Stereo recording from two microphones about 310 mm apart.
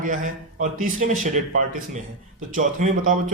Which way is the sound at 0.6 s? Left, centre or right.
Right.